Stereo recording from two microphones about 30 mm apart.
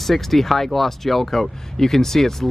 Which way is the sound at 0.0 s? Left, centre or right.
Centre.